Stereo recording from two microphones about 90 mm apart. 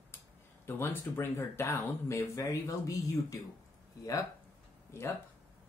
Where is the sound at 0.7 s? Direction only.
25° left (ahead or behind).